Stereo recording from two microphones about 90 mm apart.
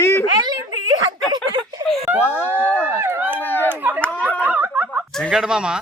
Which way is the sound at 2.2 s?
25° left (ahead or behind).